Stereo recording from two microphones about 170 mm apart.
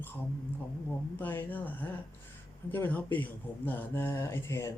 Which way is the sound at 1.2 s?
10° left (ahead or behind).